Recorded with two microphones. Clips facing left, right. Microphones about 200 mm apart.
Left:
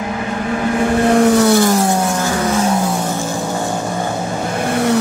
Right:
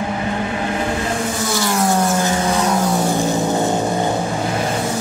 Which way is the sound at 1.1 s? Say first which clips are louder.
Left 11 dB; 65° left (ahead or behind).